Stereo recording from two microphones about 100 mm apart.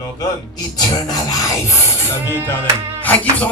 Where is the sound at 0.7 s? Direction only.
45° left (ahead or behind).